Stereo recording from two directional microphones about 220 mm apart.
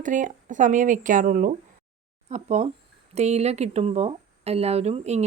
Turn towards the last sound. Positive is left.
turn(degrees=-30)  # may be behind; listen again after turning